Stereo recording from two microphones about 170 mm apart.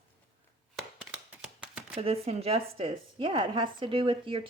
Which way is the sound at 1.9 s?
35° right (ahead or behind).